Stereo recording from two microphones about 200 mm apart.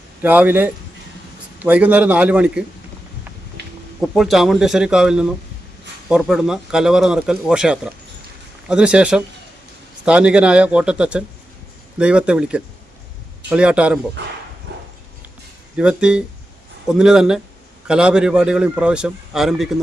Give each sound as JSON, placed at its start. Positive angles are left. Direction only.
{"t": 0.2, "sound": "a man's voice", "side_deg": -10}
{"t": 4.0, "sound": "speech", "side_deg": 0}
{"t": 14.7, "sound": "clip-clop", "side_deg": -60}
{"t": 15.8, "sound": "speech", "side_deg": -5}